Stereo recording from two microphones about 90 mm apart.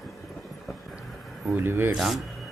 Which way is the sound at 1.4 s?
20° right (ahead or behind).